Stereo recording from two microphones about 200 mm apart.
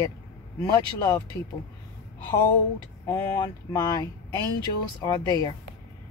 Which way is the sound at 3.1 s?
15° left (ahead or behind).